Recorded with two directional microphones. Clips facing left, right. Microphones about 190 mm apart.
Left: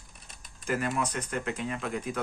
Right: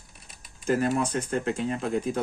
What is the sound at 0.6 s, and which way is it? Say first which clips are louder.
Speech: right 6 dB; 30° right (ahead or behind).